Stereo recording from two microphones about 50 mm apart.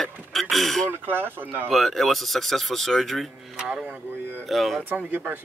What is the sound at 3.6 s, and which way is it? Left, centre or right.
Speech, centre.